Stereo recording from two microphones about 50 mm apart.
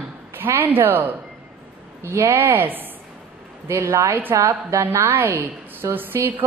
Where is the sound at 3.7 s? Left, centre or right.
Right.